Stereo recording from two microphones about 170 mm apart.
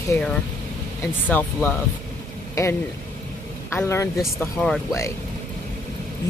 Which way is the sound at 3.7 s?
15° left (ahead or behind).